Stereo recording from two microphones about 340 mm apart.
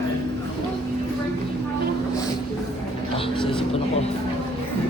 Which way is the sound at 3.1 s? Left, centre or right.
Centre.